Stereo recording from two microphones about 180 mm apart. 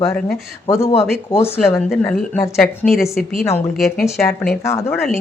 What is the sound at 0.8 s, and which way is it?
Speech, 35° left (ahead or behind).